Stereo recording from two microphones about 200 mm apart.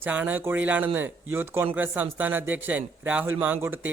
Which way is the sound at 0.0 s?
10° right (ahead or behind).